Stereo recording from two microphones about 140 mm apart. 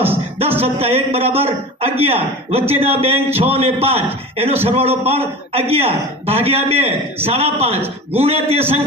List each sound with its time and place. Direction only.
0.6 s a man's voice: 45° right (ahead or behind)